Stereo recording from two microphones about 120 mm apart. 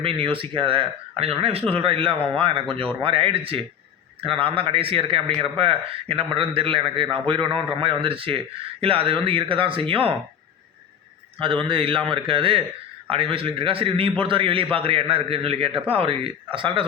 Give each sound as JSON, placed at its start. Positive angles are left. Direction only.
{"t": 0.0, "sound": "a man's voice", "side_deg": -45}
{"t": 11.3, "sound": "a man's voice", "side_deg": -45}